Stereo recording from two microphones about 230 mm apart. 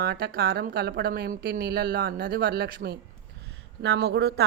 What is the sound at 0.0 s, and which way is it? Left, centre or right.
Speech, right.